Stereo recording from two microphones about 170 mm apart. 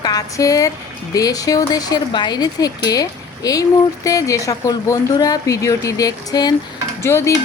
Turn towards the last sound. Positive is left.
turn(degrees=15)  # may be behind; listen again after turning